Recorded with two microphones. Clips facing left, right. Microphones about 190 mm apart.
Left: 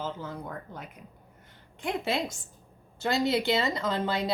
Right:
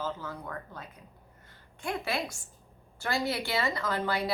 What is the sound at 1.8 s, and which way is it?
Speech, 20° left (ahead or behind).